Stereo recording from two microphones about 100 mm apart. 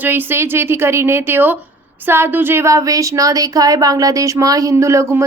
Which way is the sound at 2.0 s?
20° right (ahead or behind).